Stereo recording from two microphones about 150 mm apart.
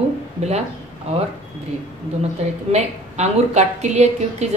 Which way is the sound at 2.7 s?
45° right (ahead or behind).